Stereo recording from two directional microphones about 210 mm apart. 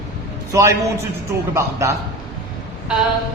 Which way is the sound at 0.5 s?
15° right (ahead or behind).